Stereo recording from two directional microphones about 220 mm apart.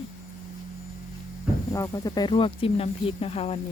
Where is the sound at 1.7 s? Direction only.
15° left (ahead or behind).